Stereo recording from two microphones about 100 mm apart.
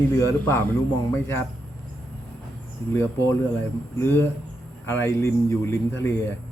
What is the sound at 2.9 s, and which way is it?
A man's voice, 30° left (ahead or behind).